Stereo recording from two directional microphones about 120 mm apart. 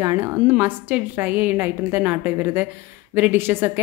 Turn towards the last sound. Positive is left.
turn(degrees=-20)  # may be behind; listen again after turning